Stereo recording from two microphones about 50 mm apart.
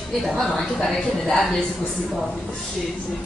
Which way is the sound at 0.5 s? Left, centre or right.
Centre.